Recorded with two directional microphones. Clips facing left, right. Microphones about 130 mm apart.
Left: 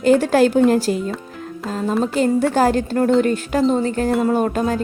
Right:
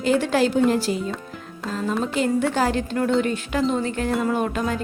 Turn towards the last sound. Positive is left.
turn(degrees=40)  # may be behind; listen again after turning